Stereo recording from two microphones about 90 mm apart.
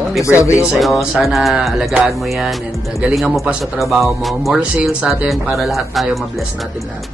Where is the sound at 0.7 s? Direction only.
Centre (ahead or behind).